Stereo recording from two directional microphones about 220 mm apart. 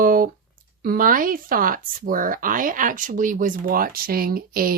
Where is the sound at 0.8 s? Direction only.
40° right (ahead or behind).